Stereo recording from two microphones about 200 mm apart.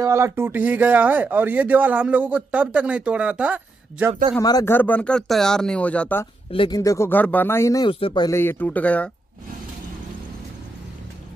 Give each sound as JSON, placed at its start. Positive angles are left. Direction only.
{"t": 0.0, "sound": "speech", "side_deg": -15}
{"t": 4.1, "sound": "speech", "side_deg": -25}
{"t": 4.4, "sound": "speech", "side_deg": 20}
{"t": 6.5, "sound": "speech", "side_deg": 25}